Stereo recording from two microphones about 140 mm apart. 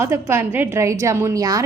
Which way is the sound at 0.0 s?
20° right (ahead or behind).